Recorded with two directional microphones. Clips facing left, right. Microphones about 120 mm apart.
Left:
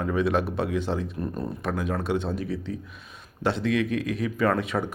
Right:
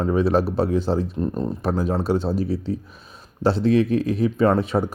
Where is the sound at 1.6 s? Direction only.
35° right (ahead or behind).